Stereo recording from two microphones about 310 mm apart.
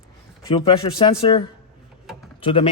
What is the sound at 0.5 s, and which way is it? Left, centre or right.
A man's voice, centre.